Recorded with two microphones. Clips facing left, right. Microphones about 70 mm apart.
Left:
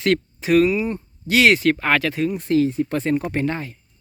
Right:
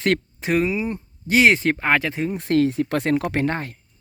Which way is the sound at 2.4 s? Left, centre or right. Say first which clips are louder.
Right 1 dB; right.